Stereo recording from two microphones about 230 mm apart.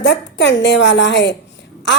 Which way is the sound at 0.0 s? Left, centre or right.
Left.